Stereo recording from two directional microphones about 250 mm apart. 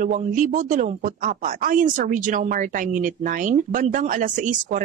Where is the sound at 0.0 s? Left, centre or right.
Right.